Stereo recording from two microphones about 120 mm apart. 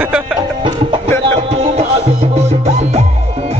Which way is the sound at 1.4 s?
55° right (ahead or behind).